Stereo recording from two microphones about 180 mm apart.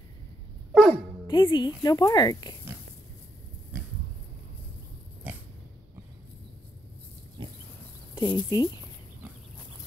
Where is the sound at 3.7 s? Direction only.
10° right (ahead or behind).